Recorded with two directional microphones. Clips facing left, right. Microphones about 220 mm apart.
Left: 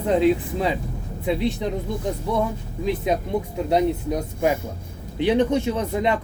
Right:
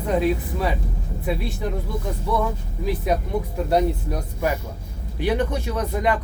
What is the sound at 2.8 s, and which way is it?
Speech, 20° left (ahead or behind).